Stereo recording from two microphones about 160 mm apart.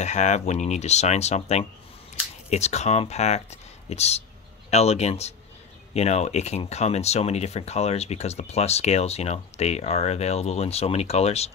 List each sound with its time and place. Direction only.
0.0 s speech: 45° left (ahead or behind)